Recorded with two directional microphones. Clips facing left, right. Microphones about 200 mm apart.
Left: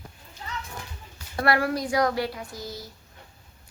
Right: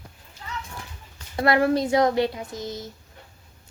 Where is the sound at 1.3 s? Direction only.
20° right (ahead or behind).